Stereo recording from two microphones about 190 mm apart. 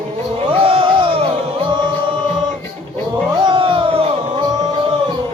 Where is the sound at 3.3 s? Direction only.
25° right (ahead or behind).